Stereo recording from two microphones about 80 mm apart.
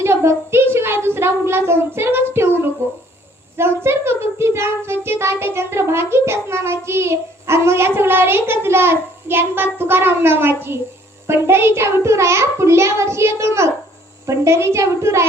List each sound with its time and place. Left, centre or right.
0.0 s speech: right